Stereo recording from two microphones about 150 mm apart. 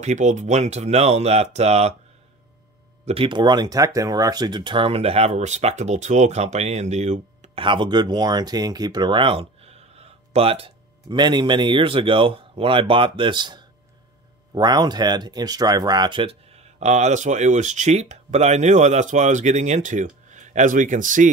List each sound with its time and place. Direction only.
0.0 s speech: 50° right (ahead or behind)
3.1 s speech: 35° right (ahead or behind)
7.6 s speech: 30° right (ahead or behind); by 21.3 s 60° right (ahead or behind)